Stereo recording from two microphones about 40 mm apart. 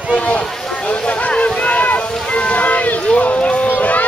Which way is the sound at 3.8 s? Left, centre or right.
Left.